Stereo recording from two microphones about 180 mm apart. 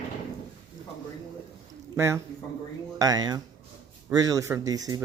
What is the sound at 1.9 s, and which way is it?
A man's voice, 15° right (ahead or behind).